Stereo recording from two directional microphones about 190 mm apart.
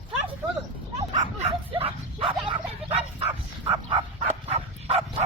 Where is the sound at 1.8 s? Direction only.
30° right (ahead or behind).